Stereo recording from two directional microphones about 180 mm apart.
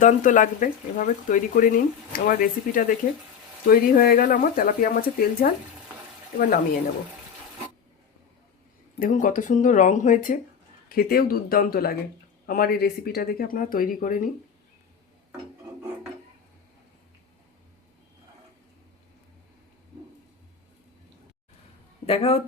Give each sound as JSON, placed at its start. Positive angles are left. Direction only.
{"t": 0.0, "sound": "speech", "side_deg": 45}
{"t": 9.0, "sound": "speech", "side_deg": 50}
{"t": 22.0, "sound": "speech", "side_deg": 35}